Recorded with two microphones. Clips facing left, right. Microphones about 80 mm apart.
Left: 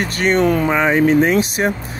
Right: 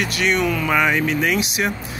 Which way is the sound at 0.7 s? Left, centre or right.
Left.